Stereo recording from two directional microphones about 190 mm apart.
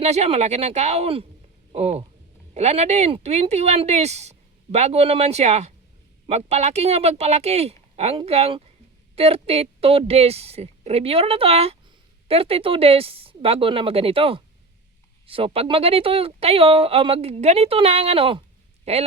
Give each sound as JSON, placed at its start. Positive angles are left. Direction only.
{"t": 0.0, "sound": "speech", "side_deg": -35}